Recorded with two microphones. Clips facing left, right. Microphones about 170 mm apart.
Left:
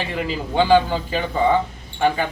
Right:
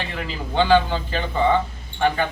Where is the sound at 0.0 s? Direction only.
10° left (ahead or behind).